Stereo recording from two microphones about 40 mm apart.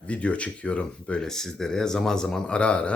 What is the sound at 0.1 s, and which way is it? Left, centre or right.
Speech, left.